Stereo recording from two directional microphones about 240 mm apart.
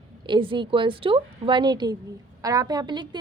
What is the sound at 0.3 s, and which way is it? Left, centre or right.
A woman's voice, centre.